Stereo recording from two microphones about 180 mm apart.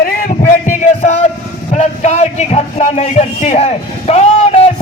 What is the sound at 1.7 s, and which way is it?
A man's voice, 40° left (ahead or behind).